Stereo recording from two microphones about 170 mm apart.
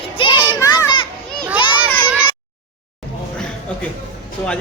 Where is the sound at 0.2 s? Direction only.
30° left (ahead or behind).